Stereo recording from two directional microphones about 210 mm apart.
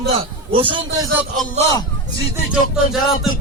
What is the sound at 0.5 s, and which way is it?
Speech, 25° right (ahead or behind).